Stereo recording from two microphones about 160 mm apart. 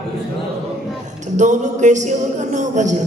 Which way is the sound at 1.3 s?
50° right (ahead or behind).